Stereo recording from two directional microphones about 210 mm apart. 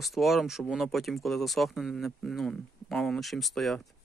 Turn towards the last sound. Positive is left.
turn(degrees=0)  # may be behind; listen again after turning